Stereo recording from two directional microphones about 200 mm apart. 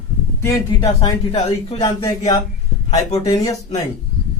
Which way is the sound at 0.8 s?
30° left (ahead or behind).